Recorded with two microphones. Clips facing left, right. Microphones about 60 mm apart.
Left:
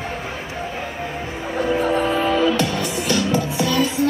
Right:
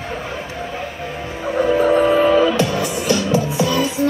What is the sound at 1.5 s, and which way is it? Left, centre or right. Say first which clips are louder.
Music: right 5 dB; centre.